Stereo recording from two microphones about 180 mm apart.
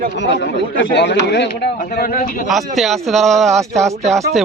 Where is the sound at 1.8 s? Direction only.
50° left (ahead or behind).